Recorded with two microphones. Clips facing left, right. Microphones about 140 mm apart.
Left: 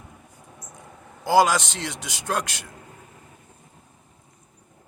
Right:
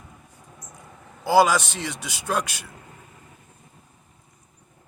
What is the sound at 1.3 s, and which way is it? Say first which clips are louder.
Speech: right 1 dB; 15° left (ahead or behind).